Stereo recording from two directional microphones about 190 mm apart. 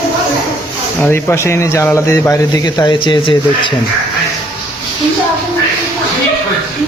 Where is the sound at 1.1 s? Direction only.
15° left (ahead or behind).